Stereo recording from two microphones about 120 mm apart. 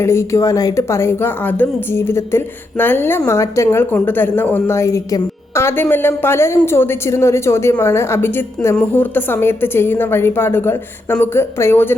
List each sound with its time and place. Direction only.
0.0 s a woman's voice: 25° left (ahead or behind)